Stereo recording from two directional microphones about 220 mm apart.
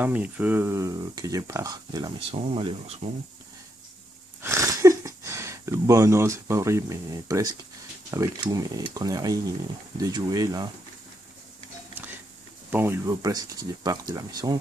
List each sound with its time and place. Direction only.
0.0 s speech: 5° right (ahead or behind); by 3.2 s 25° right (ahead or behind)
4.4 s speech: 15° right (ahead or behind)
12.7 s speech: 10° right (ahead or behind)